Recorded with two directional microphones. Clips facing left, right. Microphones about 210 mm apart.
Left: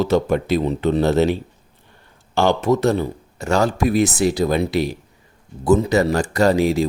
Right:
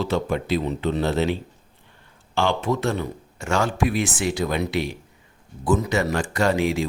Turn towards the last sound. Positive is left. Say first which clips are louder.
# left 5 dB
turn(degrees=40)  # may be behind; listen again after turning